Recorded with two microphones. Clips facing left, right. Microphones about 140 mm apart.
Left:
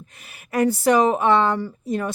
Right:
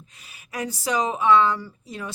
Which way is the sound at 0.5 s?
60° left (ahead or behind).